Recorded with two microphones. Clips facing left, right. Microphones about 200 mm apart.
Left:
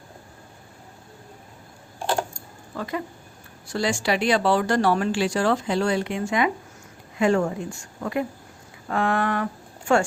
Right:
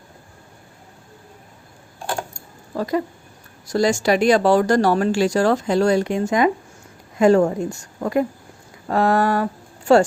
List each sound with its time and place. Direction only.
2.7 s speech: 40° right (ahead or behind)